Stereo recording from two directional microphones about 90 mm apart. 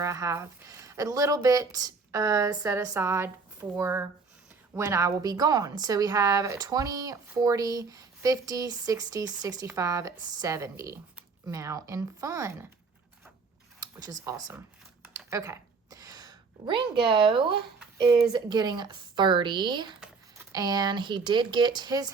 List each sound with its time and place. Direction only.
0.0 s a woman's voice: 35° right (ahead or behind)
13.8 s speech: 40° right (ahead or behind)
15.3 s a sound: 40° right (ahead or behind); by 17.5 s 65° right (ahead or behind)
18.3 s speech: 50° right (ahead or behind)
20.3 s speech: 45° right (ahead or behind)